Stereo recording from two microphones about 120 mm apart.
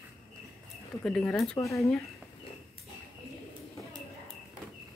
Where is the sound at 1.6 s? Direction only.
25° left (ahead or behind).